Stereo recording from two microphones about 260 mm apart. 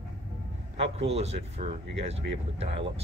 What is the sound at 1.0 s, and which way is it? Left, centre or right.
Speech, right.